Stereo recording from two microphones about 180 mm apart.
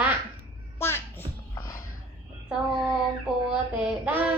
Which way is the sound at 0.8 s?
15° left (ahead or behind).